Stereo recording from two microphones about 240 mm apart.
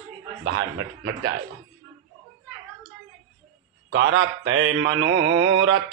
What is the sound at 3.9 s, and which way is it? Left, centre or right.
Mantra, right.